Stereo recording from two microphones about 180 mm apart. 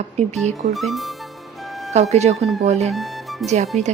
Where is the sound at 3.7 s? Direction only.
40° right (ahead or behind).